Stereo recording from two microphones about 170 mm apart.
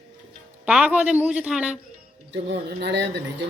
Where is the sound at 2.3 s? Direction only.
90° right.